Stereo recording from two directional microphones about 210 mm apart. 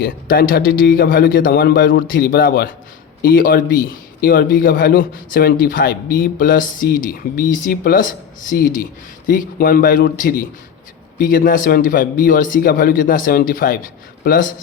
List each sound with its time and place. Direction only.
0.0 s a man's voice: 45° left (ahead or behind)